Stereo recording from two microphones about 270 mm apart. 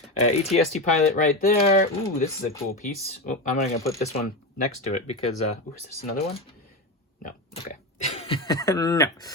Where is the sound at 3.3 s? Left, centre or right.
Left.